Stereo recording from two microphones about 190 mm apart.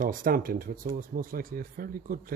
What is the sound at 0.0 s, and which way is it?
Speech, 45° right (ahead or behind).